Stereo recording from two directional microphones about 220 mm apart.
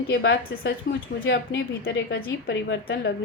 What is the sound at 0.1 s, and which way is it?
Speech, 50° left (ahead or behind).